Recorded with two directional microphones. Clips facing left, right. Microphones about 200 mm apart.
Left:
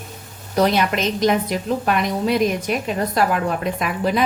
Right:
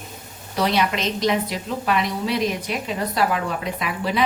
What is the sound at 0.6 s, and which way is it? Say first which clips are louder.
A woman's voice: left 4 dB; 50° left (ahead or behind).